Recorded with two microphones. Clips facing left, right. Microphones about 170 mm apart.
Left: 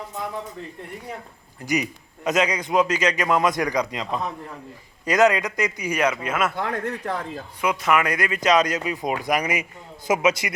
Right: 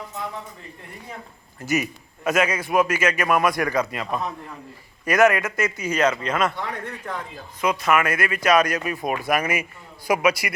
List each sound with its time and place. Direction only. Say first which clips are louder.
1.6 s a man's voice: right 1 dB; 15° left (ahead or behind)
6.6 s speech: left 5 dB; 40° left (ahead or behind)
7.6 s a man's voice: right 1 dB; 15° left (ahead or behind)